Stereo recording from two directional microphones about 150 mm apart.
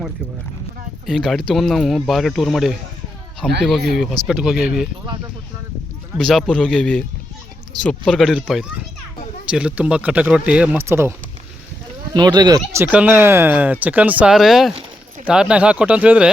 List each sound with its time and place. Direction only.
1.0 s speech: centre (ahead or behind)
6.1 s speech: 5° left (ahead or behind); by 11.1 s 15° right (ahead or behind)
12.1 s speech: 30° right (ahead or behind)
12.8 s speech: 10° right (ahead or behind)